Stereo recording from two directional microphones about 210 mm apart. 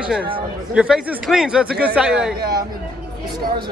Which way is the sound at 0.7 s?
5° right (ahead or behind).